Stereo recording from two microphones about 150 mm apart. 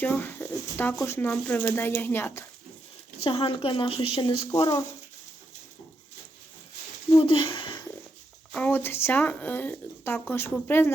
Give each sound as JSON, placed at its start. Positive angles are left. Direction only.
{"t": 0.0, "sound": "speech", "side_deg": 10}
{"t": 3.2, "sound": "a woman's voice", "side_deg": 35}
{"t": 4.4, "sound": "speech", "side_deg": 25}
{"t": 7.1, "sound": "a sound", "side_deg": 35}
{"t": 8.5, "sound": "speech", "side_deg": 10}